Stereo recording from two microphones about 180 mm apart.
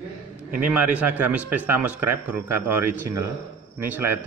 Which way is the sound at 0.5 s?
5° right (ahead or behind).